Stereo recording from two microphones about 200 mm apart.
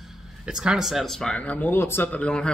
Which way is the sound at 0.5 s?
5° right (ahead or behind).